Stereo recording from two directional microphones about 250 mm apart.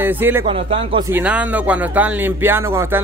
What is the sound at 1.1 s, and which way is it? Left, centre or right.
Speech, centre.